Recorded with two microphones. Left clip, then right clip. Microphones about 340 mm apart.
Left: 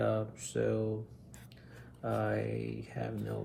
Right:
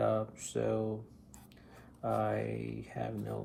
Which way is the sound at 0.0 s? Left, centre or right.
Centre.